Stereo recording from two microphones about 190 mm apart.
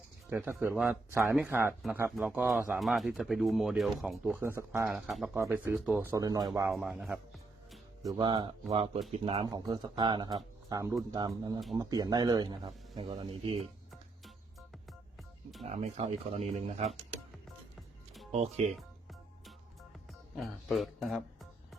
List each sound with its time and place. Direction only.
0.3 s speech: 10° right (ahead or behind)
6.7 s speech: centre (ahead or behind)
8.0 s speech: 20° right (ahead or behind)
15.6 s speech: 35° right (ahead or behind)
18.3 s speech: 35° right (ahead or behind)
20.3 s speech: centre (ahead or behind)